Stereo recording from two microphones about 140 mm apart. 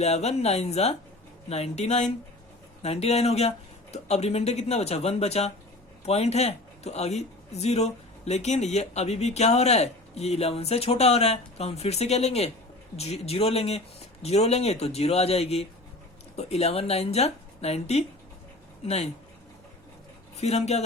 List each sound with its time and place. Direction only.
0.0 s a man's voice: 50° left (ahead or behind)
20.3 s a man's voice: 50° left (ahead or behind)